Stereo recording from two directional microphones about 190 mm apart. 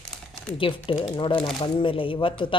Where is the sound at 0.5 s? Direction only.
25° left (ahead or behind).